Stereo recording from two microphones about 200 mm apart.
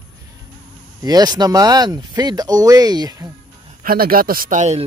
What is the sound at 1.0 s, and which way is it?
Speech, 20° right (ahead or behind).